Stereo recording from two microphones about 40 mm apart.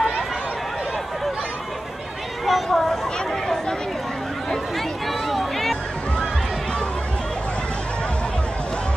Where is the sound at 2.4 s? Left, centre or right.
Centre.